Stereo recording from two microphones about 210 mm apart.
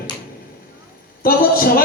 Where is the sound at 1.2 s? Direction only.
45° left (ahead or behind).